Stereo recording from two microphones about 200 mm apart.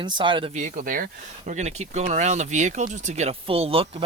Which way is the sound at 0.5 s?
40° right (ahead or behind).